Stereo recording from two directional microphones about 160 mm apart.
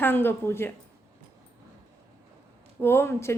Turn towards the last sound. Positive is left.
turn(degrees=15)  # may be behind; listen again after turning